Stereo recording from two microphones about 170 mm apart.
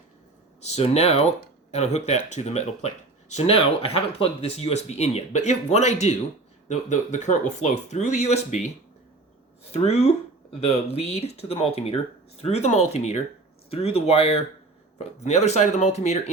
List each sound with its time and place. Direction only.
0.6 s speech: 40° left (ahead or behind)
9.8 s speech: 40° left (ahead or behind)